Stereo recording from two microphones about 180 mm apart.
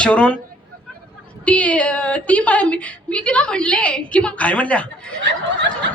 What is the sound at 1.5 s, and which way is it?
A woman's voice, 10° left (ahead or behind).